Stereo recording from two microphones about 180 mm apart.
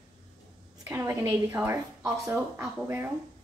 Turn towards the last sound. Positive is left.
turn(degrees=-10)  # may be behind; listen again after turning